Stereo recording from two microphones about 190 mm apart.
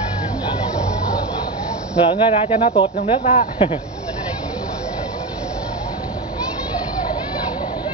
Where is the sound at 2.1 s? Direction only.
30° left (ahead or behind).